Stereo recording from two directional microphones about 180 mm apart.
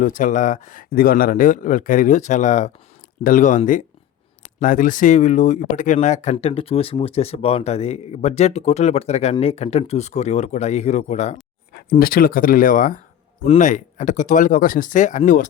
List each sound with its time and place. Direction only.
0.0 s speech: 45° left (ahead or behind)
6.3 s speech: 30° left (ahead or behind)
11.7 s speech: 55° left (ahead or behind)